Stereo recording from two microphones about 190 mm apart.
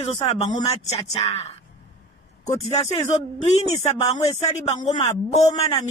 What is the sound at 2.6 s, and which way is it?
Speech, 35° left (ahead or behind).